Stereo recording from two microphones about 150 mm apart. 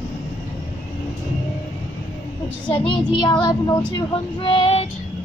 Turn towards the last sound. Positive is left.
turn(degrees=40)  # may be behind; listen again after turning